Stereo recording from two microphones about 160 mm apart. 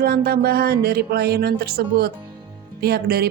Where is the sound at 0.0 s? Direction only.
75° right (ahead or behind).